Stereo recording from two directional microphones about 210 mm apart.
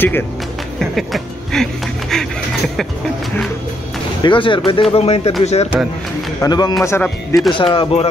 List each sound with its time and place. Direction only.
0.7 s music: centre (ahead or behind)
4.2 s speech: 25° left (ahead or behind)
6.4 s a man's voice: 20° left (ahead or behind)
7.5 s speech: 25° left (ahead or behind)